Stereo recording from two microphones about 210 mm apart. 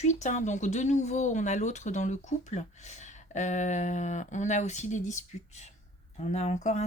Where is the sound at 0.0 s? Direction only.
35° left (ahead or behind).